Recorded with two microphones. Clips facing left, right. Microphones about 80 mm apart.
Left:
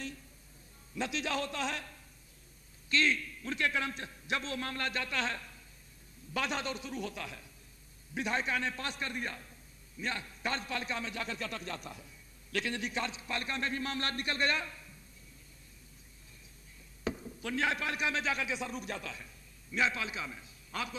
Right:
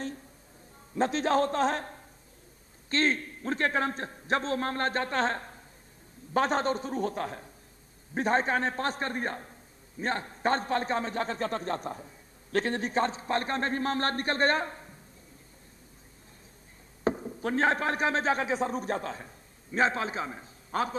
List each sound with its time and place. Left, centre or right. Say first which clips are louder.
0.9 s a man's voice: right 9 dB; right
17.0 s a man's voice: right 8 dB; right